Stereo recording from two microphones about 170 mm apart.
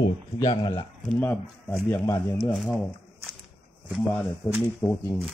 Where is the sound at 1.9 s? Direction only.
20° left (ahead or behind).